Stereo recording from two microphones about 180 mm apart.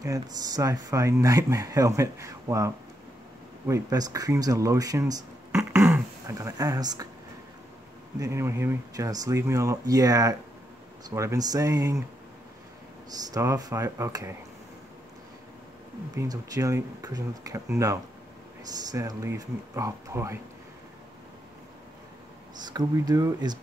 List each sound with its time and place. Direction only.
0.0 s speech: 20° right (ahead or behind)
8.2 s speech: 15° right (ahead or behind)
13.3 s speech: 20° right (ahead or behind)
16.2 s speech: 20° right (ahead or behind)
22.7 s speech: 20° right (ahead or behind)